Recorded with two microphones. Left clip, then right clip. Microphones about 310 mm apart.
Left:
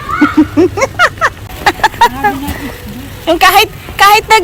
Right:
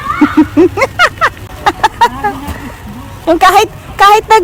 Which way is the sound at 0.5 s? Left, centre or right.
Centre.